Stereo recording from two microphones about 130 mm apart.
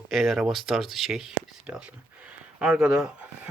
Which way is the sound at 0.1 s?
Centre (ahead or behind).